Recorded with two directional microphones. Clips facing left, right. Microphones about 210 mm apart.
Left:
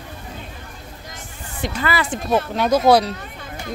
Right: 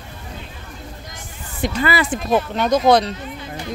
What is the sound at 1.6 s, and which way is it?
Speech, 15° right (ahead or behind).